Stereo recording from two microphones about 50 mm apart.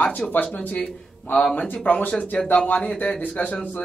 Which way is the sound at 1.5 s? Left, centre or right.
Left.